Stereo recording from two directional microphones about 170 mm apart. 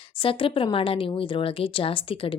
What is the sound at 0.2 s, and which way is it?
A woman's voice, 30° left (ahead or behind).